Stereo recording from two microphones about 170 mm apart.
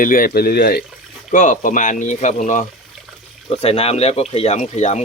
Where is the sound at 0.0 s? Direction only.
55° left (ahead or behind).